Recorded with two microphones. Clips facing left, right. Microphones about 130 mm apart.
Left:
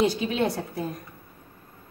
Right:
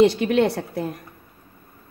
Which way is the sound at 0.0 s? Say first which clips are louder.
Right 7 dB; 70° right (ahead or behind).